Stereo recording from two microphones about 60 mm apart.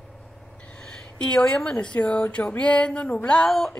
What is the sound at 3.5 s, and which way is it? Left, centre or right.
Speech, centre.